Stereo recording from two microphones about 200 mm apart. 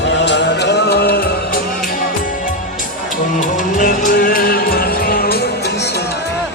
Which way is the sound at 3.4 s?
40° left (ahead or behind).